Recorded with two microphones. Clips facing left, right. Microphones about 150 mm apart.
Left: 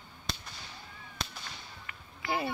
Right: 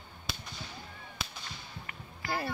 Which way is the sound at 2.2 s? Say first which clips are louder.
Left 2 dB; 20° left (ahead or behind).